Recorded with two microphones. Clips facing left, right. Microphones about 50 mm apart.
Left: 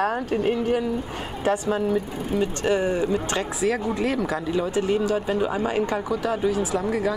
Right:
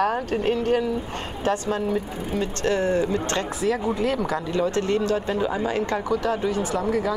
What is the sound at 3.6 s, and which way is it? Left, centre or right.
Speech, centre.